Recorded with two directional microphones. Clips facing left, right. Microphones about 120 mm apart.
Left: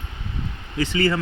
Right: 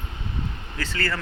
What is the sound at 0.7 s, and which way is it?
Speech, 15° left (ahead or behind).